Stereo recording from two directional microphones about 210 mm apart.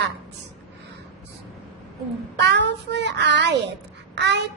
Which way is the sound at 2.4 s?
55° right (ahead or behind).